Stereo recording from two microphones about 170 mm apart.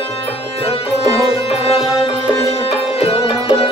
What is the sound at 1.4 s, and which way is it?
Music, 35° left (ahead or behind).